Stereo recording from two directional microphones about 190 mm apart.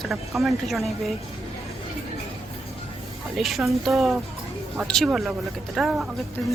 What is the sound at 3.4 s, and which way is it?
Speech, centre (ahead or behind).